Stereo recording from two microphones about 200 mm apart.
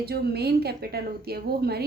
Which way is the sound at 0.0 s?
55° right (ahead or behind).